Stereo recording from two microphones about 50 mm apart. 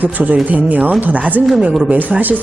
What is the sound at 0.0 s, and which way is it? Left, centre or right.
A woman's voice, right.